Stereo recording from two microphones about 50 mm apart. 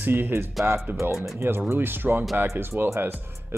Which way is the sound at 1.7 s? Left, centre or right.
Right.